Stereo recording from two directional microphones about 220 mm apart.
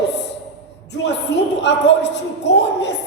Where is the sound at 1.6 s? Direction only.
55° left (ahead or behind).